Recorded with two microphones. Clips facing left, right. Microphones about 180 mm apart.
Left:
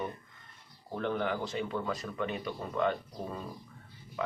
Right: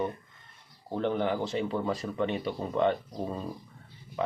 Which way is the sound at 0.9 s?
25° right (ahead or behind).